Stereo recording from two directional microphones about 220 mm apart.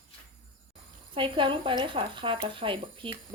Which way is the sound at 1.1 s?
20° right (ahead or behind).